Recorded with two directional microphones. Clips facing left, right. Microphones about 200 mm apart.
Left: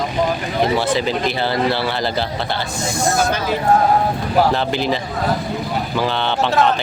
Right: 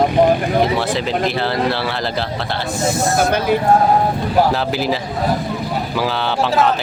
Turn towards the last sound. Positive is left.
turn(degrees=-5)  # may be behind; listen again after turning